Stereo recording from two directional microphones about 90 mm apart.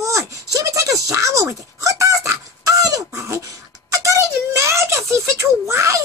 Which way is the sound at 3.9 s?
35° right (ahead or behind).